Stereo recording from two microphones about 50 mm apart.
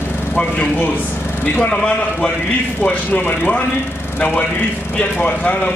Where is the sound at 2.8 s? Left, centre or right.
Left.